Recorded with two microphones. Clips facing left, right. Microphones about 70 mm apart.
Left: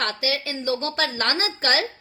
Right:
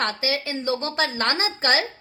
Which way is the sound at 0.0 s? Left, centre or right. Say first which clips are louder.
Right 1 dB; right.